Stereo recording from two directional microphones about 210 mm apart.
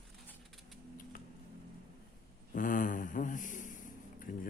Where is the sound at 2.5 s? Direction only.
40° left (ahead or behind).